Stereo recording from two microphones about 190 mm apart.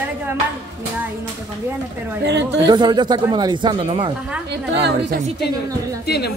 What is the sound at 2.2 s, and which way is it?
Speech, 65° right (ahead or behind).